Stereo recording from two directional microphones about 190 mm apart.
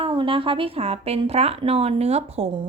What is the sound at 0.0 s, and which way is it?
Speech, 25° right (ahead or behind).